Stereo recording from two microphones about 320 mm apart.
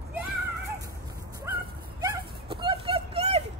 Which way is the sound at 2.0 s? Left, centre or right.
Centre.